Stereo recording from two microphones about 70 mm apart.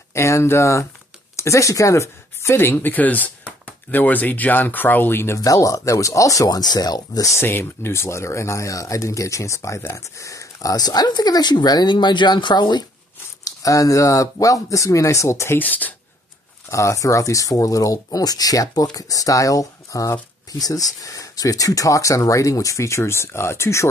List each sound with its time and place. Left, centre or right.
0.1 s speech: left
5.4 s speech: left
7.2 s speech: left
13.4 s speech: left
15.6 s speech: left
16.7 s speech: left